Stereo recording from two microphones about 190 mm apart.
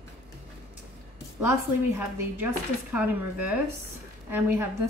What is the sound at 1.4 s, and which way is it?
A woman's voice, 10° right (ahead or behind).